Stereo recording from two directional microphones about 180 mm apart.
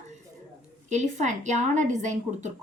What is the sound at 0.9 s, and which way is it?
A woman's voice, 40° right (ahead or behind).